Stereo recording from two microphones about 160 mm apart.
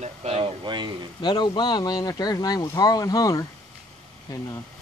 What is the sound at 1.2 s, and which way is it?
Speech, 25° left (ahead or behind).